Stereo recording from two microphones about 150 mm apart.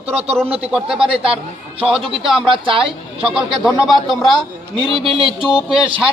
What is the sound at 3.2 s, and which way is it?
Speech, 5° right (ahead or behind).